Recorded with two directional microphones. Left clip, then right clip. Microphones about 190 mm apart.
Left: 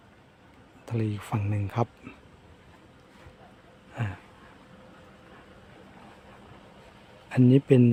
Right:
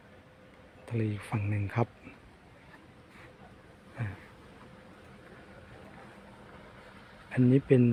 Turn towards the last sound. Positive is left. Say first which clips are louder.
# left 4 dB
turn(degrees=20)  # may be behind; listen again after turning